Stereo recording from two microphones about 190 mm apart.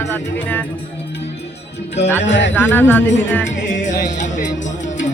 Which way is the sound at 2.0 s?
10° left (ahead or behind).